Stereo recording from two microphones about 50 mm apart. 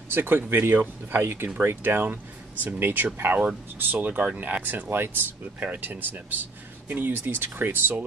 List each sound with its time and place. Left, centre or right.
0.1 s speech: right